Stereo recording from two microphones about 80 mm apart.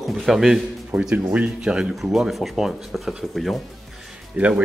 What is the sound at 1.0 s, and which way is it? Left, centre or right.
Speech, centre.